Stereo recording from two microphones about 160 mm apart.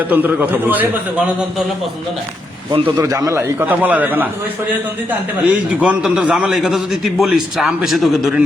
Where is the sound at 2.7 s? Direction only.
35° right (ahead or behind).